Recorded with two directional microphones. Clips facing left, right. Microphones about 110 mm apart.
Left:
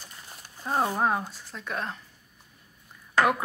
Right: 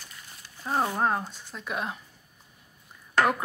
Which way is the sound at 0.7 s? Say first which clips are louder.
Left 1 dB; 5° left (ahead or behind).